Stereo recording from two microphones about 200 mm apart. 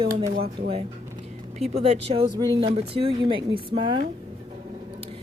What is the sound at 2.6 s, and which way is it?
Speech, 30° right (ahead or behind).